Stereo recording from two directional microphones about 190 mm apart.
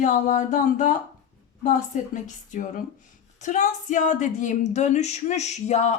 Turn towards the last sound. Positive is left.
turn(degrees=35)  # may be behind; listen again after turning